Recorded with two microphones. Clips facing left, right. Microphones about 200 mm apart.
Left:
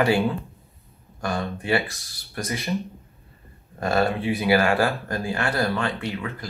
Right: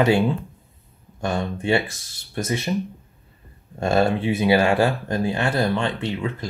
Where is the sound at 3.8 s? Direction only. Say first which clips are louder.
Right 3 dB; 25° right (ahead or behind).